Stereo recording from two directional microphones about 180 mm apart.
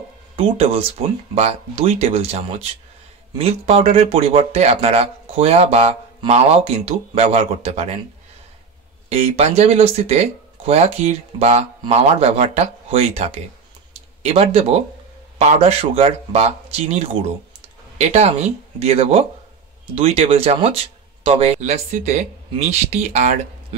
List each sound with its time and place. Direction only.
0.4 s speech: 30° right (ahead or behind)
9.1 s speech: 35° right (ahead or behind)